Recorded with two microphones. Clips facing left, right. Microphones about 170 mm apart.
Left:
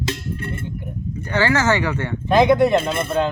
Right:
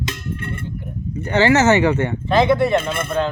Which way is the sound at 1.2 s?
25° right (ahead or behind).